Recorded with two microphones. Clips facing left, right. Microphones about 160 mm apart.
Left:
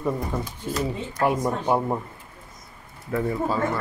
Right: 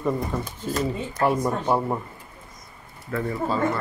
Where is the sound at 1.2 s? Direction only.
10° left (ahead or behind).